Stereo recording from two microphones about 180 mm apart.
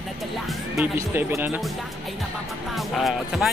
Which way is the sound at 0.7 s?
15° right (ahead or behind).